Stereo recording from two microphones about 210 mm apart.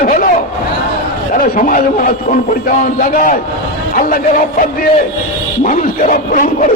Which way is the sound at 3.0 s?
40° left (ahead or behind).